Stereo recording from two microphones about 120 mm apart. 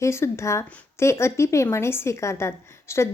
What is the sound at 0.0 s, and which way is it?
Speech, 20° left (ahead or behind).